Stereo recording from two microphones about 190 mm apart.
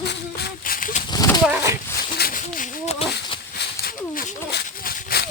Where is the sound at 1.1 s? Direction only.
20° left (ahead or behind).